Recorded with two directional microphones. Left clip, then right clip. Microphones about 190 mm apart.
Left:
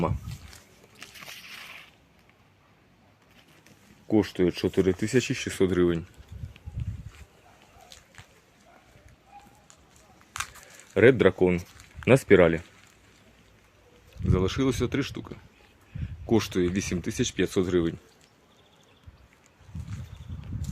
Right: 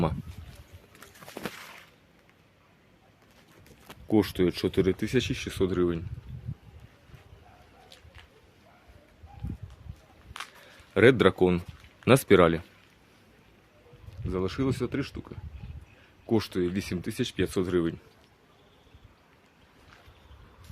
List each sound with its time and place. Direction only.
1.5 s a sound: 20° right (ahead or behind)
4.1 s speech: centre (ahead or behind)
5.0 s speech: 25° left (ahead or behind)
10.3 s a sound: 70° left (ahead or behind)
10.9 s speech: 5° right (ahead or behind)
14.3 s speech: 40° left (ahead or behind); by 17.9 s 25° left (ahead or behind)